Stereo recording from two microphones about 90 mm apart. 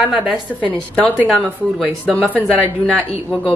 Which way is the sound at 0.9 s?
15° left (ahead or behind).